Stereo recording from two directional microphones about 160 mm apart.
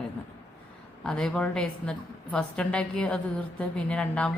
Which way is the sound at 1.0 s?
5° left (ahead or behind).